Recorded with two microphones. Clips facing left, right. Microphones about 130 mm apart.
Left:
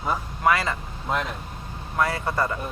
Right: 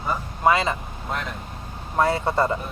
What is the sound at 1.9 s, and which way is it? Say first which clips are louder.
Speech: right 4 dB; 25° right (ahead or behind).